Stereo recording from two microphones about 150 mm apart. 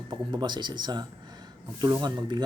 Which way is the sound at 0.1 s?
30° right (ahead or behind).